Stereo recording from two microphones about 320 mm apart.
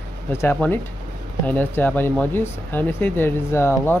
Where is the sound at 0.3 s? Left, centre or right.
Centre.